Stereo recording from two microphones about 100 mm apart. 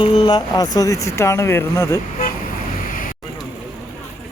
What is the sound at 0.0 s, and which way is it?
Vehicle, 80° left.